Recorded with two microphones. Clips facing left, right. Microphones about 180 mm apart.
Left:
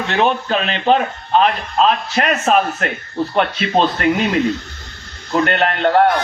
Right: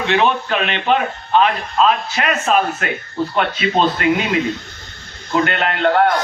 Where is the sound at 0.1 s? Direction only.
40° left (ahead or behind).